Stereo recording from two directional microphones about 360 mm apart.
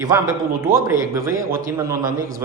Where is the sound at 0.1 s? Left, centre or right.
Centre.